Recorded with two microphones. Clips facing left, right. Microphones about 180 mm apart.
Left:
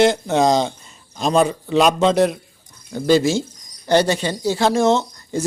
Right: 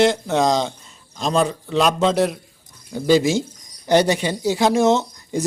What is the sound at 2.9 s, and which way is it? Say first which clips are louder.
Speech: even; 10° right (ahead or behind).